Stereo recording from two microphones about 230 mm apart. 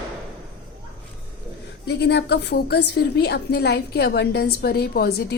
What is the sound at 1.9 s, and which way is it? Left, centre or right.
A woman's voice, left.